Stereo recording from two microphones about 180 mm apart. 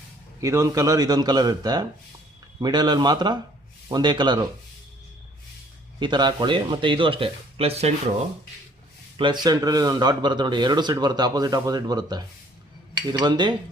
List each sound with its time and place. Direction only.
0.3 s speech: 15° right (ahead or behind)
6.0 s speech: 25° right (ahead or behind)
9.1 s speech: 25° right (ahead or behind)